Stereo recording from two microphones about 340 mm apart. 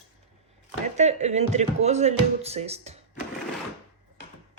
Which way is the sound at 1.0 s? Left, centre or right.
Centre.